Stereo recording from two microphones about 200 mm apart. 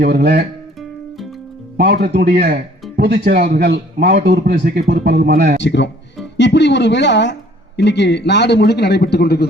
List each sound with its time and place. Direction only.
0.0 s a man's voice: 55° right (ahead or behind)
1.8 s a man's voice: 55° right (ahead or behind)
5.6 s a man's voice: 60° left (ahead or behind)